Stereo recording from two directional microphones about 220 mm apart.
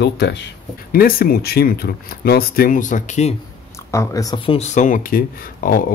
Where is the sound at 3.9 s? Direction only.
15° left (ahead or behind); by 5.9 s 40° left (ahead or behind).